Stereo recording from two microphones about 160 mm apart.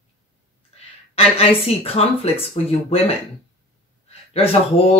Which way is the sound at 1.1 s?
40° left (ahead or behind).